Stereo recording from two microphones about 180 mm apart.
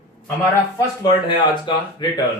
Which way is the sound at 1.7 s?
25° left (ahead or behind).